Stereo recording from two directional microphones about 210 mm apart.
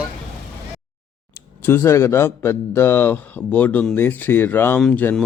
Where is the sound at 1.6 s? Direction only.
10° left (ahead or behind).